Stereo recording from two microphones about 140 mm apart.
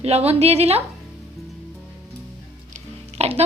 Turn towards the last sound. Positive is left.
turn(degrees=-50)  # may be behind; listen again after turning